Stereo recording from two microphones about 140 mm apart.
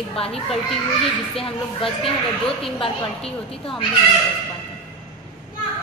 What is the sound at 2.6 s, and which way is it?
A woman's voice, 40° left (ahead or behind).